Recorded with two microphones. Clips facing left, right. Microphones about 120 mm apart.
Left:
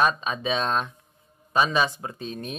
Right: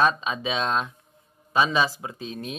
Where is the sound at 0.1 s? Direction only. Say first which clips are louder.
Left 1 dB; 5° right (ahead or behind).